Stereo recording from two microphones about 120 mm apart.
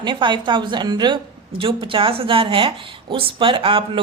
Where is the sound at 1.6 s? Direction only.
50° right (ahead or behind).